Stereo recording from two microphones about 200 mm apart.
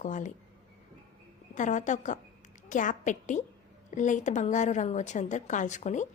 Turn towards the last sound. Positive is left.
turn(degrees=35)  # may be behind; listen again after turning